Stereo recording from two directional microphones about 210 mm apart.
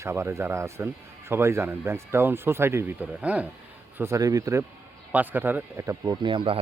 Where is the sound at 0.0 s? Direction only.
15° right (ahead or behind).